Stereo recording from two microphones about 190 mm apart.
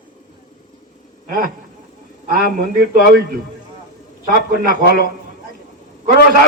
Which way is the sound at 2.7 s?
45° right (ahead or behind).